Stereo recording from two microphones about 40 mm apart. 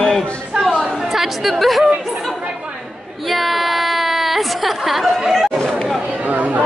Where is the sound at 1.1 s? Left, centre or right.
Centre.